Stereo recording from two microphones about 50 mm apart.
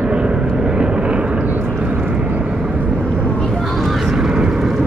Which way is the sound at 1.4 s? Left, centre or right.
Right.